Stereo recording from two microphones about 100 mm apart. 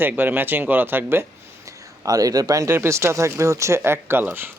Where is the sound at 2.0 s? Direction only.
35° right (ahead or behind); by 4.5 s 20° right (ahead or behind).